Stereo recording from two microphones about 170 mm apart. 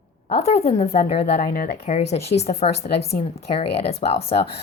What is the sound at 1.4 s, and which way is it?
Speech, 60° left (ahead or behind).